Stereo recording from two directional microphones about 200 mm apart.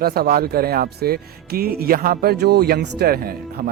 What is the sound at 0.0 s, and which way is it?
Speech, 50° right (ahead or behind).